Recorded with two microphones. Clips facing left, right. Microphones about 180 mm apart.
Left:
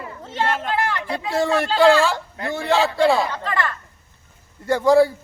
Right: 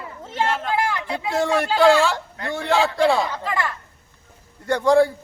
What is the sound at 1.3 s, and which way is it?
A man's voice, centre (ahead or behind).